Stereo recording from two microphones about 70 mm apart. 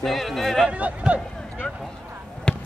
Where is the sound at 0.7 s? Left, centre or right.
Centre.